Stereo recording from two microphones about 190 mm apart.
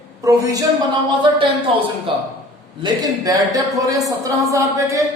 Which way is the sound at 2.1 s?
25° right (ahead or behind).